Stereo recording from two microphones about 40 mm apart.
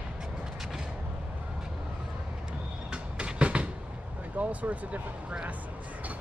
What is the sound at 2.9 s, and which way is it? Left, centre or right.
Train, right.